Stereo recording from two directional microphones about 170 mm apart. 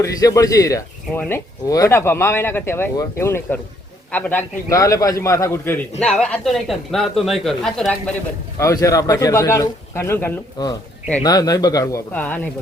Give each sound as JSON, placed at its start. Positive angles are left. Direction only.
{"t": 0.0, "sound": "a man's voice", "side_deg": 20}
{"t": 8.5, "sound": "a man's voice", "side_deg": 20}